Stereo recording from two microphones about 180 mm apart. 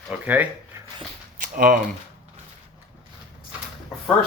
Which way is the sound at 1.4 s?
50° right (ahead or behind).